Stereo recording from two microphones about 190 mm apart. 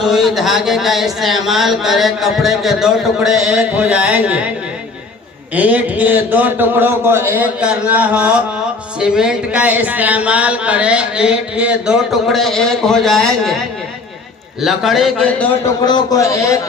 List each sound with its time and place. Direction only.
0.0 s speech: centre (ahead or behind)
5.5 s a man's voice: 10° right (ahead or behind)
14.6 s speech: centre (ahead or behind)
15.9 s a man's voice: 20° left (ahead or behind)